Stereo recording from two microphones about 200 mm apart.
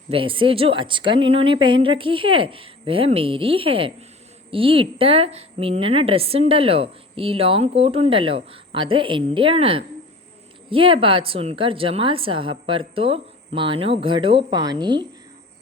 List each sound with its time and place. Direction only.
0.1 s a woman's voice: 25° right (ahead or behind)